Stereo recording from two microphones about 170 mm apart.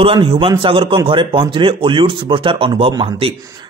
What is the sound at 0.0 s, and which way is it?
A man's voice, 30° right (ahead or behind).